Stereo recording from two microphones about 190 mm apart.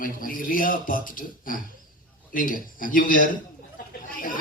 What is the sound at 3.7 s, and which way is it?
Chatter, 45° left (ahead or behind).